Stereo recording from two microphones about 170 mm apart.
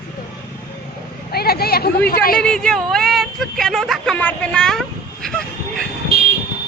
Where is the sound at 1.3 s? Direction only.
65° left (ahead or behind).